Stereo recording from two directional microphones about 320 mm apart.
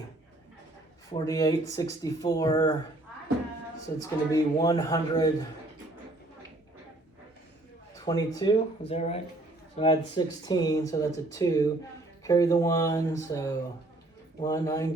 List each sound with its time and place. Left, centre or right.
1.1 s speech: centre
3.9 s speech: centre
8.0 s speech: centre